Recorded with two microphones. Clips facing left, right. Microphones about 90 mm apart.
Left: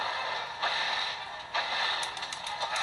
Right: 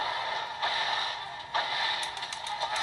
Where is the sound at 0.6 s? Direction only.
25° left (ahead or behind).